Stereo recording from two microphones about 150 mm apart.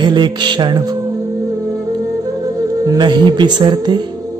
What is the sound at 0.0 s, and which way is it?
Speech, 30° right (ahead or behind).